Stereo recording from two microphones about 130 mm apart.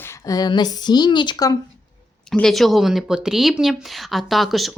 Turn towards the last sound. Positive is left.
turn(degrees=0)  # may be behind; listen again after turning